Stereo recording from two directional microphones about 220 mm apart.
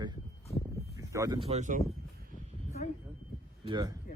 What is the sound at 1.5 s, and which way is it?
Speech, 35° right (ahead or behind).